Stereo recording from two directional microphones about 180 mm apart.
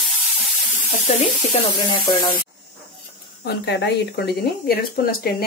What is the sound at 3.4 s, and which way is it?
Speech, 70° left (ahead or behind).